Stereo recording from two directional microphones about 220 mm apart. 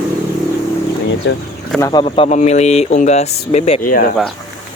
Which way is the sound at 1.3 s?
55° left (ahead or behind).